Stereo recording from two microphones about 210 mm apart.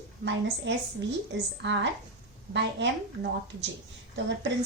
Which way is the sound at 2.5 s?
55° right (ahead or behind).